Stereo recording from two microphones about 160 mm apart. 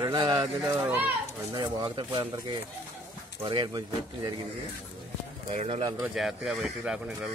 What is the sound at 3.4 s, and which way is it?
Speech, 30° right (ahead or behind).